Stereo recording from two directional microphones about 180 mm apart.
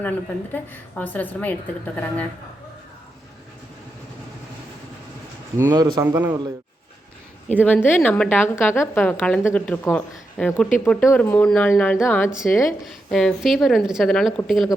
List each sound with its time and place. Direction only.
0.5 s a woman's voice: 10° left (ahead or behind)
5.5 s a man's voice: 15° right (ahead or behind)
6.1 s a man's voice: 10° right (ahead or behind)
7.4 s a woman's voice: 10° left (ahead or behind)